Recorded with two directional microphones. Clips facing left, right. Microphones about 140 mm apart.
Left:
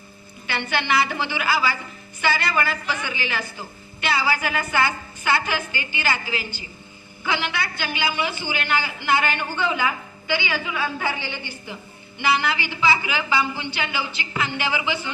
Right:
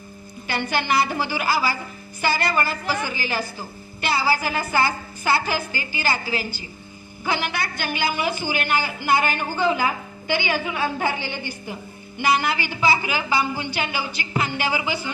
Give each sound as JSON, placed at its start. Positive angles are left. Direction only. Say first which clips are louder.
{"t": 0.4, "sound": "a woman's voice", "louder": "right 1 dB", "side_deg": -40}